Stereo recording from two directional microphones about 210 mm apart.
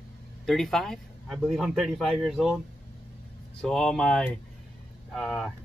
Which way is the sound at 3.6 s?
Centre (ahead or behind).